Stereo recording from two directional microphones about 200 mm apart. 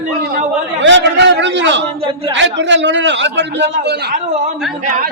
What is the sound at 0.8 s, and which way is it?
A man's voice, 60° right (ahead or behind).